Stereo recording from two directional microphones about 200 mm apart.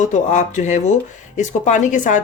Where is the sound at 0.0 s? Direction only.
35° left (ahead or behind).